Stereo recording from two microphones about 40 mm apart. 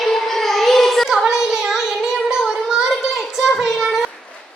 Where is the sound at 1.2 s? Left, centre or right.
Centre.